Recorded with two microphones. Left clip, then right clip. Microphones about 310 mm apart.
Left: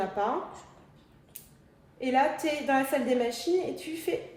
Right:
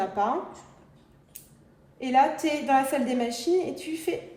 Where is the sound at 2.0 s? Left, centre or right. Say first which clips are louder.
Right 4 dB; centre.